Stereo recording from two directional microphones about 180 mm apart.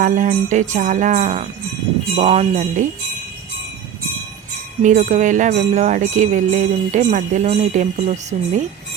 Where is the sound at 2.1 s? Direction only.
35° right (ahead or behind).